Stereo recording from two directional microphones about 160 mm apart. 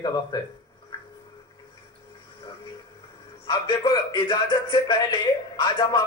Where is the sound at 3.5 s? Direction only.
30° left (ahead or behind).